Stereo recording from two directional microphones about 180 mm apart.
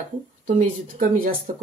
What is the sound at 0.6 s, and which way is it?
Speech, 50° right (ahead or behind).